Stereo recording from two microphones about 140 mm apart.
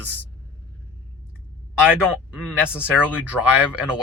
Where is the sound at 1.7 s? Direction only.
5° right (ahead or behind).